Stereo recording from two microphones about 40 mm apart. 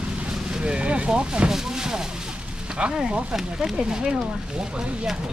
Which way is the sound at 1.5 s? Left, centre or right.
Centre.